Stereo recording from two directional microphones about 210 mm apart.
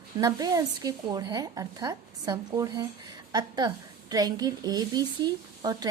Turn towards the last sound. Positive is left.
turn(degrees=-20)  # may be behind; listen again after turning